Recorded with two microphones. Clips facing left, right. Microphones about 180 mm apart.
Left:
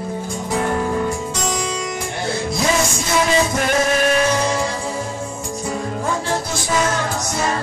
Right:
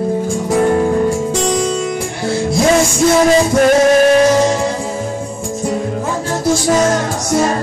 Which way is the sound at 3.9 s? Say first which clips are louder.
Right 8 dB; 35° right (ahead or behind).